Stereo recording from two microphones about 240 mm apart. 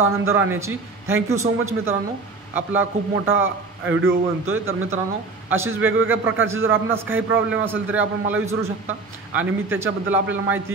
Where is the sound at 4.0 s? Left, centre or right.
Right.